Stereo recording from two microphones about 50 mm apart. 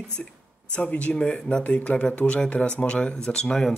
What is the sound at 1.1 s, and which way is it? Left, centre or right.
Speech, centre.